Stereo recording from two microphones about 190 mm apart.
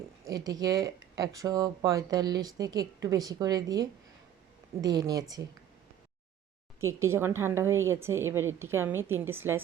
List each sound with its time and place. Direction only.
0.3 s speech: 20° right (ahead or behind)
6.7 s a woman's voice: 15° right (ahead or behind)